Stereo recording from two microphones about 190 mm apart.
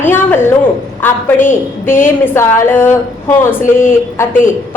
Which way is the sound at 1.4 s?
40° left (ahead or behind).